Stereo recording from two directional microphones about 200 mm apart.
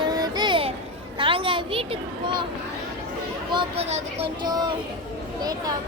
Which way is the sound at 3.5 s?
25° right (ahead or behind).